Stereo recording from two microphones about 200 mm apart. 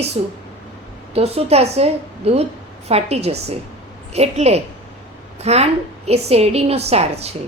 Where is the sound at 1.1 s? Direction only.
30° right (ahead or behind).